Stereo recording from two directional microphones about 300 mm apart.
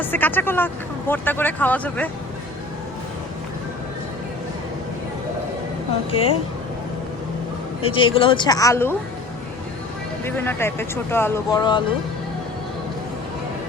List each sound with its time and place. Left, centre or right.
0.0 s speech: centre
6.1 s speech: centre
7.8 s speech: centre
10.2 s speech: centre